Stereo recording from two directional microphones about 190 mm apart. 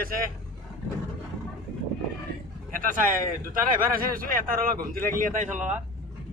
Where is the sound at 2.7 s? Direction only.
45° right (ahead or behind).